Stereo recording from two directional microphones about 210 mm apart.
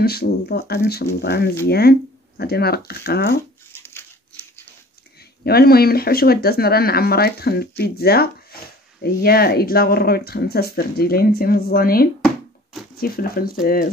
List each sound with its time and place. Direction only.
0.0 s speech: 50° left (ahead or behind)
3.8 s a sound: 10° left (ahead or behind)
5.4 s speech: 50° left (ahead or behind)